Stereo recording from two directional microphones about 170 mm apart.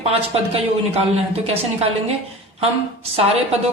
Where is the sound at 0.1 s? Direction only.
35° right (ahead or behind).